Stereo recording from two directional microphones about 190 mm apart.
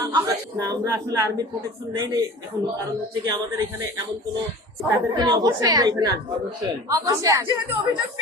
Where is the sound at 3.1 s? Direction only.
20° right (ahead or behind).